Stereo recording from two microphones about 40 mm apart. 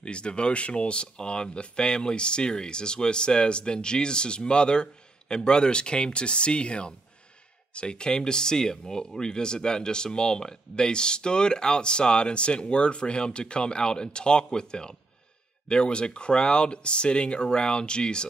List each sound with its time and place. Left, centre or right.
0.0 s speech: left